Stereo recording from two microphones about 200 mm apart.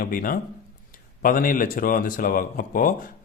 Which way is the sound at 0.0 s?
45° left (ahead or behind).